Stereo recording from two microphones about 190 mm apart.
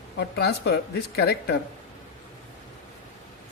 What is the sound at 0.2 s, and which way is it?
A woman's voice, 60° left (ahead or behind).